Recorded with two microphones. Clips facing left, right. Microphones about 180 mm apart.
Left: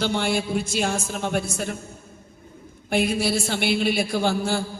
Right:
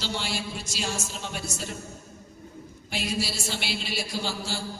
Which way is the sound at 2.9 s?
55° left (ahead or behind).